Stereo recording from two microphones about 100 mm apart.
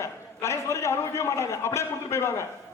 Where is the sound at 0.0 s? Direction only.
30° left (ahead or behind).